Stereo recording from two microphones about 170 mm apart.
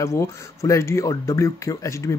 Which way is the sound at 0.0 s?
15° left (ahead or behind).